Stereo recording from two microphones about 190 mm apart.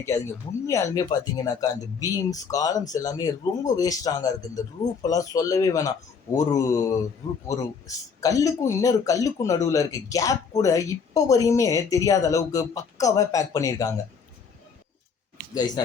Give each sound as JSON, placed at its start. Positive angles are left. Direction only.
{"t": 0.0, "sound": "speech", "side_deg": 15}
{"t": 7.4, "sound": "speech", "side_deg": 20}
{"t": 15.5, "sound": "speech", "side_deg": 20}